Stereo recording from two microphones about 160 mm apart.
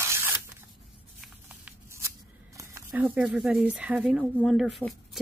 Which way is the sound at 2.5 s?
20° right (ahead or behind).